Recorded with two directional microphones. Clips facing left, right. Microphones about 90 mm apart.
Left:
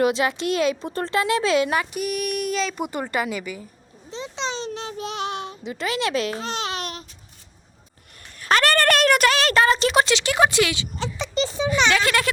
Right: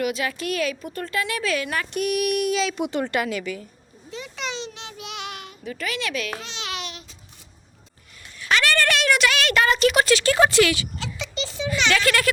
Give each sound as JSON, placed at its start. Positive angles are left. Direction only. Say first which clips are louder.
{"t": 0.0, "sound": "a woman's voice", "louder": "left 5 dB", "side_deg": 25}
{"t": 1.9, "sound": "a sound", "louder": "right 3 dB", "side_deg": 0}
{"t": 2.9, "sound": "speech", "louder": "right 1 dB", "side_deg": 5}
{"t": 4.1, "sound": "child singing", "louder": "left 3 dB", "side_deg": 30}
{"t": 5.6, "sound": "a woman's voice", "louder": "left 3 dB", "side_deg": 30}
{"t": 6.4, "sound": "babbling", "louder": "left 5 dB", "side_deg": 40}
{"t": 8.4, "sound": "a woman's voice", "louder": "left 2 dB", "side_deg": 45}